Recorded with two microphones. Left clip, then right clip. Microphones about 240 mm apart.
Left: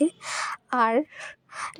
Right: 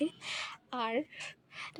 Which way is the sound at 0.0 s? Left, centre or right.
Left.